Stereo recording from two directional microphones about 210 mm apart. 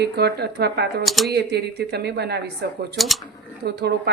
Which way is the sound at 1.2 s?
50° right (ahead or behind).